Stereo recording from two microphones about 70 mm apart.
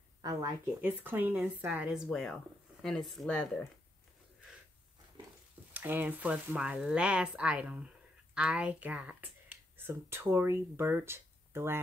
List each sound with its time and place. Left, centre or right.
0.2 s a woman's voice: right
0.7 s speech: right
2.0 s speech: centre
5.7 s speech: right
9.8 s speech: right